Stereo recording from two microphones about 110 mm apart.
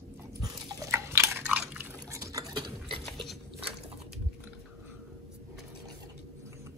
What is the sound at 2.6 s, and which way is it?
Stir, 45° right (ahead or behind).